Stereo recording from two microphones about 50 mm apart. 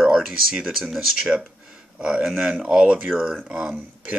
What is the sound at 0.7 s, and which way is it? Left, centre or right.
Speech, centre.